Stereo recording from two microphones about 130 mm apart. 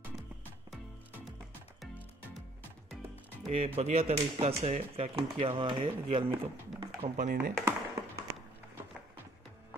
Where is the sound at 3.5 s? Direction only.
50° right (ahead or behind).